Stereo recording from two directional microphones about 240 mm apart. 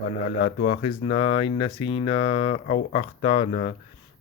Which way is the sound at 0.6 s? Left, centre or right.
Left.